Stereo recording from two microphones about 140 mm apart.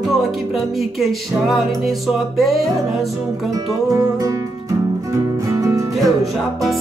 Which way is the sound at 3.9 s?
25° right (ahead or behind).